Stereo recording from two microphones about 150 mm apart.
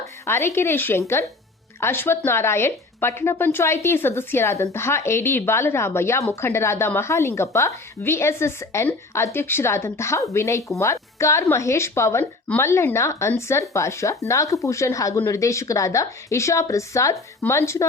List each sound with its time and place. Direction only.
0.3 s speech: 15° left (ahead or behind)